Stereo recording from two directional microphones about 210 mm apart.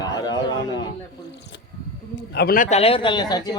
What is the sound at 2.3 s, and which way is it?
Speech, 50° left (ahead or behind).